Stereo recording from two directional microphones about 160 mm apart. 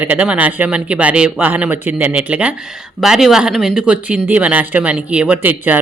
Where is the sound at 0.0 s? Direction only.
10° right (ahead or behind).